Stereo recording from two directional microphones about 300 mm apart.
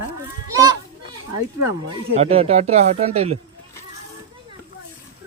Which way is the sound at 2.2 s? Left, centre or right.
Right.